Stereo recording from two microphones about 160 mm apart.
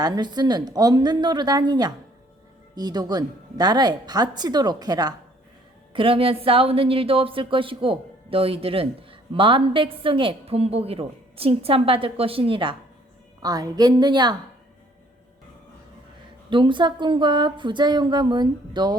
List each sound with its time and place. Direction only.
0.0 s a woman's voice: 25° right (ahead or behind)
16.5 s speech: 30° right (ahead or behind)